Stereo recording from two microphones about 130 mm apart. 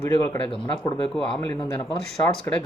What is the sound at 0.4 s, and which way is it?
Speech, 40° left (ahead or behind).